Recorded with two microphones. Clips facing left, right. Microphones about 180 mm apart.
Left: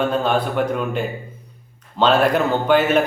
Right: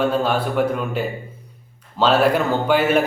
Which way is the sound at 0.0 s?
5° right (ahead or behind).